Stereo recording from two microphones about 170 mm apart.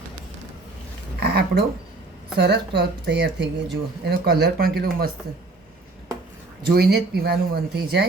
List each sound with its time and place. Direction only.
1.2 s speech: 70° right (ahead or behind); by 3.4 s 90° right
4.0 s speech: 70° right (ahead or behind)
6.6 s speech: 65° right (ahead or behind)